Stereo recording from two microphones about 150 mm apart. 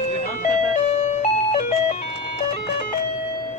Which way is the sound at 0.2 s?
60° left (ahead or behind).